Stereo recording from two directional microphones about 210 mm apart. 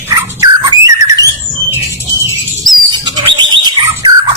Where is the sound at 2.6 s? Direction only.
20° right (ahead or behind).